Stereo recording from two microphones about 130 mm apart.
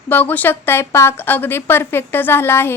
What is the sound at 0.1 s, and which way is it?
A woman's voice, 15° left (ahead or behind).